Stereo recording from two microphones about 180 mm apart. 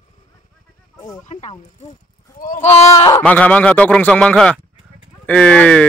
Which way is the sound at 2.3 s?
50° left (ahead or behind).